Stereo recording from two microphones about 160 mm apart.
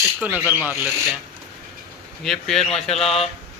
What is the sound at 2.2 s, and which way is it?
Speech, centre (ahead or behind).